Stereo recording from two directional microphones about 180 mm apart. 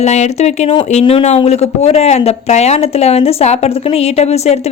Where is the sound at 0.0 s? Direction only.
40° left (ahead or behind).